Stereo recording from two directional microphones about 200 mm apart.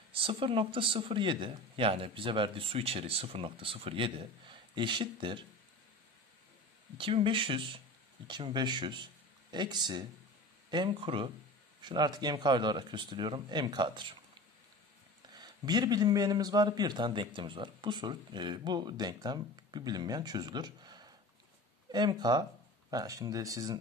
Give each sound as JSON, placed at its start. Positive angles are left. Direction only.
{"t": 0.1, "sound": "a man's voice", "side_deg": -25}
{"t": 7.0, "sound": "a man's voice", "side_deg": -25}
{"t": 15.3, "sound": "a man's voice", "side_deg": -20}